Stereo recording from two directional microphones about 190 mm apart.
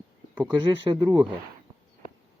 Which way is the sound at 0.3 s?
25° right (ahead or behind).